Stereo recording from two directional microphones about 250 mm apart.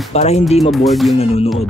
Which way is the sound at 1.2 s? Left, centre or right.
Left.